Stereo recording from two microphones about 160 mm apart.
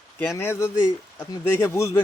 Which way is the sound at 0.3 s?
15° left (ahead or behind).